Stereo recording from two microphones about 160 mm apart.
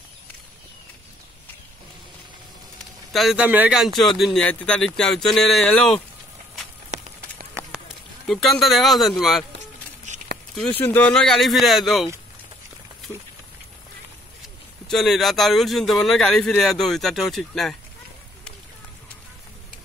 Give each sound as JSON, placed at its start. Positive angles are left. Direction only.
{"t": 3.1, "sound": "speech", "side_deg": 0}
{"t": 6.9, "sound": "a sound", "side_deg": -45}
{"t": 8.3, "sound": "speech", "side_deg": 0}
{"t": 10.1, "sound": "a sound", "side_deg": -50}
{"t": 10.8, "sound": "speech", "side_deg": 10}
{"t": 14.9, "sound": "speech", "side_deg": 0}